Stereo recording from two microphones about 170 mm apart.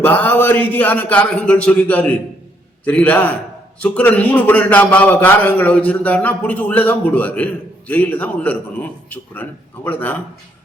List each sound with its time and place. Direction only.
0.0 s a man's voice: 10° left (ahead or behind)